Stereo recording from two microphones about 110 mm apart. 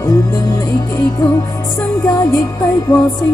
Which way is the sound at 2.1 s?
30° left (ahead or behind).